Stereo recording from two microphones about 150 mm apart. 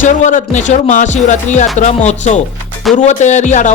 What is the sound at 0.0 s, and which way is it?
Speech, 60° left (ahead or behind).